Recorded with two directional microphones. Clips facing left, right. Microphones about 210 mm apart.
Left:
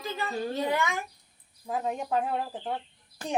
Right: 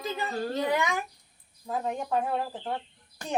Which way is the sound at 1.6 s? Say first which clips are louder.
Even; 15° left (ahead or behind).